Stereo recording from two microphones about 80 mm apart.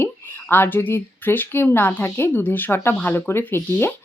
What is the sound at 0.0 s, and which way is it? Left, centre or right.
Speech, left.